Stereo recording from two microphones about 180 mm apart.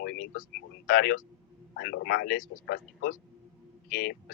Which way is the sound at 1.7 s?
60° left (ahead or behind).